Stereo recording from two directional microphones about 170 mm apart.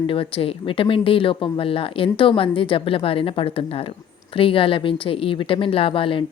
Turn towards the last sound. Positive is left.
turn(degrees=30)  # may be behind; listen again after turning